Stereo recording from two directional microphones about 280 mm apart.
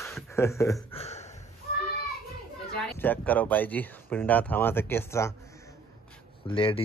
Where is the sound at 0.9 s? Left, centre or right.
Left.